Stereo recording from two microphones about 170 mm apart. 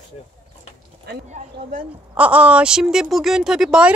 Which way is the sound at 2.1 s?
10° right (ahead or behind).